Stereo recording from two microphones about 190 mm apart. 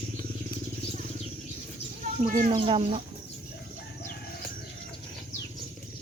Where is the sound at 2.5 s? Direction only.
25° right (ahead or behind).